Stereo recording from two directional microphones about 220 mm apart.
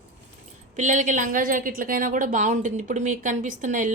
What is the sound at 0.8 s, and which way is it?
A woman's voice, 35° right (ahead or behind).